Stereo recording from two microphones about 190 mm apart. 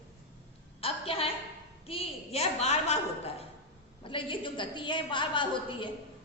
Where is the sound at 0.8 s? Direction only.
30° left (ahead or behind).